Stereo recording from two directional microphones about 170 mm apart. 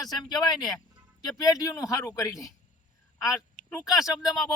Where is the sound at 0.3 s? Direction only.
25° left (ahead or behind).